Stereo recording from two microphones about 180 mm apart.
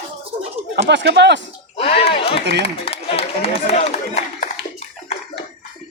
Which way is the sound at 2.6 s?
35° left (ahead or behind).